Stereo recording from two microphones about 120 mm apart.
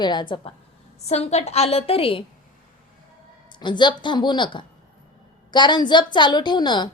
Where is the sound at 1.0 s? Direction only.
60° left (ahead or behind).